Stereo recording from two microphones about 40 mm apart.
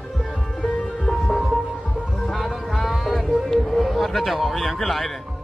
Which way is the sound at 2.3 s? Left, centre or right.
Centre.